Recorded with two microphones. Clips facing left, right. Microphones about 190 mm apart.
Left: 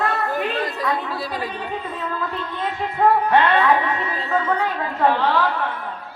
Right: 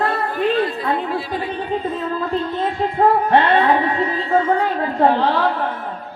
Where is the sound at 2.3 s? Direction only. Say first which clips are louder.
Right 6 dB; 30° right (ahead or behind).